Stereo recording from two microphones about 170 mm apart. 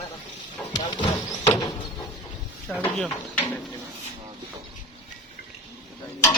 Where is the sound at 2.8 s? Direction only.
10° left (ahead or behind).